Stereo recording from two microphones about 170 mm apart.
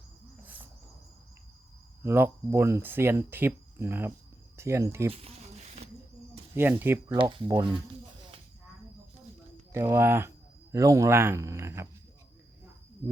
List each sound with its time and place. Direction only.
2.0 s speech: 15° right (ahead or behind)
6.5 s speech: 10° right (ahead or behind)
7.1 s speech: 30° right (ahead or behind)
9.7 s speech: 15° right (ahead or behind)